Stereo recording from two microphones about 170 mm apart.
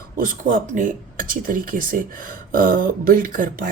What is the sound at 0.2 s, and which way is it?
A woman's voice, 50° right (ahead or behind).